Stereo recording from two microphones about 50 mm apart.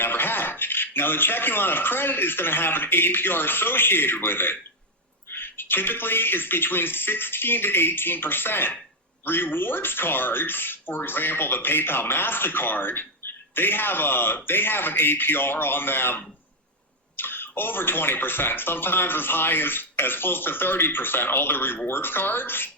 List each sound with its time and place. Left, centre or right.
0.0 s speech: left